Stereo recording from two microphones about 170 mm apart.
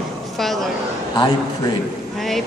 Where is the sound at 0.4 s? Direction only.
Centre (ahead or behind).